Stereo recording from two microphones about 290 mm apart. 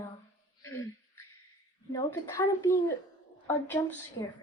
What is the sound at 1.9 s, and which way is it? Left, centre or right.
Speech, centre.